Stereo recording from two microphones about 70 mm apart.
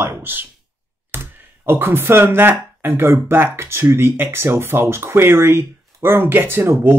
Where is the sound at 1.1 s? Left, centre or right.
Right.